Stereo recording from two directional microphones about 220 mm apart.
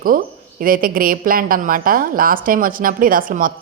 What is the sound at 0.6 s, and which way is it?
A woman's voice, 40° right (ahead or behind).